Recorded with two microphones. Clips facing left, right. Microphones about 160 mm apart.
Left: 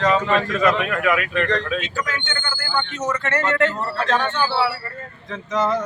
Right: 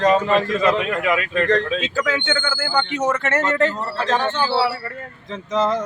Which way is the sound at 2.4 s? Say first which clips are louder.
Right 6 dB; 90° right.